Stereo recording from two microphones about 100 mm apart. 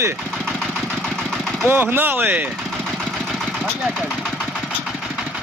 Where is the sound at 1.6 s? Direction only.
20° right (ahead or behind).